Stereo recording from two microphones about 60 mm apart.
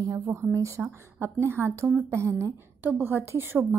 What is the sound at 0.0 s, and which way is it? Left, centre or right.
Speech, right.